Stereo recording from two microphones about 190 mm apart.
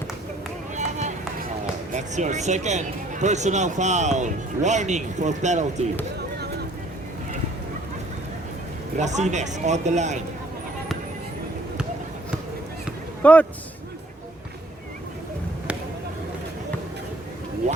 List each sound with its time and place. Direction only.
0.8 s run: 40° right (ahead or behind)
1.9 s speech: 40° right (ahead or behind)
9.0 s speech: 40° right (ahead or behind)
13.2 s a man's voice: 5° left (ahead or behind)